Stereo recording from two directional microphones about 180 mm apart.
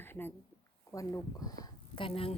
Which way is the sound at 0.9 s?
15° left (ahead or behind).